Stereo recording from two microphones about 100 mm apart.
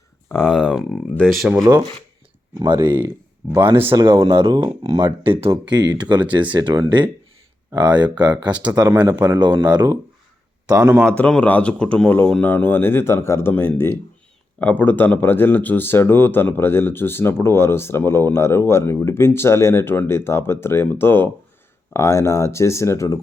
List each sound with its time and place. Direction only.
0.4 s speech: 5° right (ahead or behind)
1.6 s speech: 40° right (ahead or behind)
2.8 s speech: 25° right (ahead or behind)
3.9 s speech: 50° right (ahead or behind)
4.3 s speech: 65° right (ahead or behind)
4.5 s speech: 40° right (ahead or behind)
5.0 s speech: 65° right (ahead or behind)
5.7 s speech: 45° right (ahead or behind)
11.1 s speech: 10° left (ahead or behind); by 23.1 s 30° left (ahead or behind)